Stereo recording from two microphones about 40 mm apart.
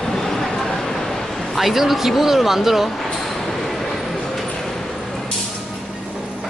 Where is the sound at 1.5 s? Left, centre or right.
Centre.